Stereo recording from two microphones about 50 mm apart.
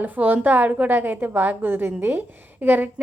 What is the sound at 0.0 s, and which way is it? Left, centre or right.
A woman's voice, right.